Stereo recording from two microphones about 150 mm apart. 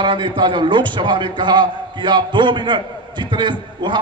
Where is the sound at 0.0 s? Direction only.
35° right (ahead or behind).